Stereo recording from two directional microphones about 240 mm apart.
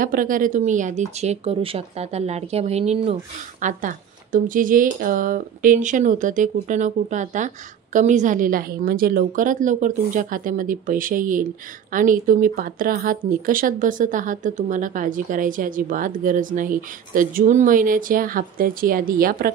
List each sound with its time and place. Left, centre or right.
0.0 s a woman's voice: right